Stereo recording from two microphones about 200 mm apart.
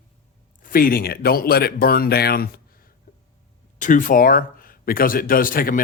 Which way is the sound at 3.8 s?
40° left (ahead or behind).